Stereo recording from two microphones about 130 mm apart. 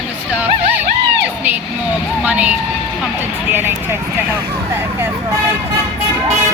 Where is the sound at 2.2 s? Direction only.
10° right (ahead or behind).